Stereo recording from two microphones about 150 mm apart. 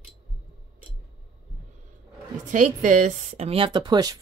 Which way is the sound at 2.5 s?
60° right (ahead or behind).